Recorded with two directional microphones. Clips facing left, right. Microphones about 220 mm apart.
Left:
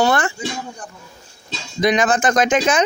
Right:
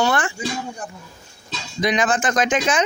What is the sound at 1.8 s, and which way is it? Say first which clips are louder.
Speech: left 3 dB; 45° left (ahead or behind).